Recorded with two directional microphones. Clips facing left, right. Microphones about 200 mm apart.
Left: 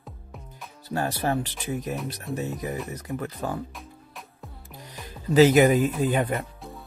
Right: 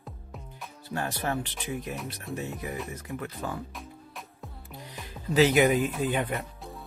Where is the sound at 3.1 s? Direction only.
35° left (ahead or behind).